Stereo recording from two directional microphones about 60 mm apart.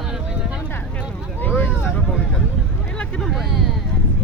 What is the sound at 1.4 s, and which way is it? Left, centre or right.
Vehicle, left.